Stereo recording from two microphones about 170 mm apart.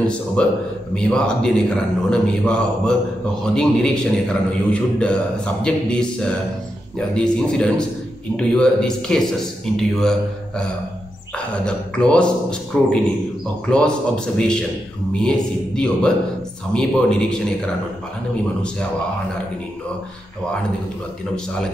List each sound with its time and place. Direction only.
0.0 s a man's voice: 5° left (ahead or behind)
11.3 s a man's voice: 5° left (ahead or behind)
13.7 s a man's voice: 5° left (ahead or behind)